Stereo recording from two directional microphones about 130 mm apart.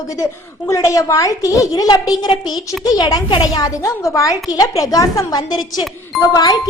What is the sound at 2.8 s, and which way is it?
A woman's voice, 30° left (ahead or behind).